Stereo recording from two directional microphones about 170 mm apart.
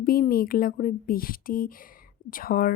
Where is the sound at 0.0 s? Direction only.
60° left (ahead or behind).